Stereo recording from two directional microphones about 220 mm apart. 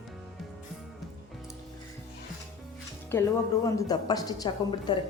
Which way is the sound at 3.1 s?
10° left (ahead or behind).